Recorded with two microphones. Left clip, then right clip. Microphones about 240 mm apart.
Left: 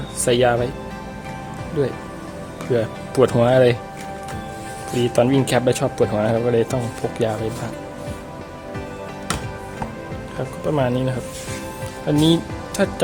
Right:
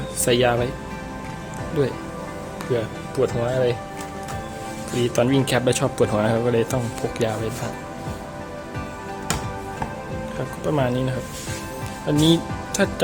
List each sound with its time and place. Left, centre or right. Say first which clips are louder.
0.3 s speech: left 2 dB; centre
1.8 s speech: left 1 dB; centre
3.2 s speech: left 7 dB; left
4.9 s speech: left 3 dB; centre
10.7 s speech: left 2 dB; centre
12.2 s speech: even; centre